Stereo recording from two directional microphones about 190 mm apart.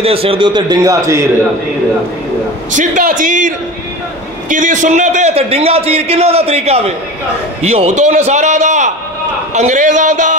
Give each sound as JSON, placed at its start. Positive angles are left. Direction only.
{"t": 0.0, "sound": "a man's voice", "side_deg": -30}
{"t": 2.7, "sound": "a man's voice", "side_deg": -40}